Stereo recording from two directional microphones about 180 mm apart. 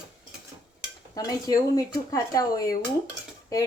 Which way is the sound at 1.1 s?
20° left (ahead or behind).